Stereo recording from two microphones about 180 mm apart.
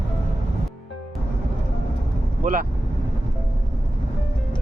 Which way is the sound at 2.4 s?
50° right (ahead or behind).